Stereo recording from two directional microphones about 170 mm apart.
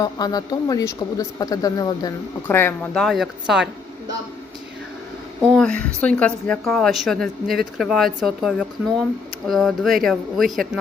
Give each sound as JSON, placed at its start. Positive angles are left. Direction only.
{"t": 0.0, "sound": "speech", "side_deg": 25}
{"t": 2.9, "sound": "speech", "side_deg": 0}
{"t": 5.5, "sound": "speech", "side_deg": 5}